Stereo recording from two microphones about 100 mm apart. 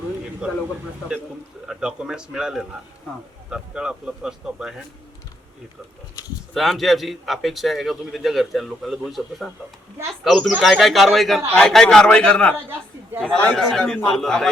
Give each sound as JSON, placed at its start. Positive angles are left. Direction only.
{"t": 0.4, "sound": "speech", "side_deg": -10}
{"t": 1.6, "sound": "speech", "side_deg": -5}
{"t": 6.5, "sound": "a man's voice", "side_deg": 0}